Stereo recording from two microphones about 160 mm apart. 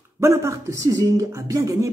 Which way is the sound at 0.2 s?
20° right (ahead or behind).